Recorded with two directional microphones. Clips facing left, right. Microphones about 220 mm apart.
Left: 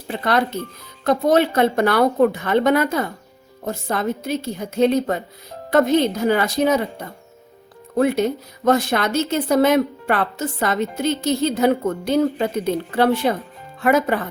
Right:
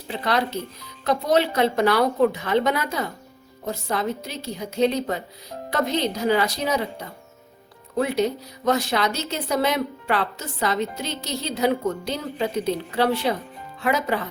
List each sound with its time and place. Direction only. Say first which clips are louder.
0.1 s speech: left 4 dB; 50° left (ahead or behind)
7.9 s speech: left 4 dB; 50° left (ahead or behind)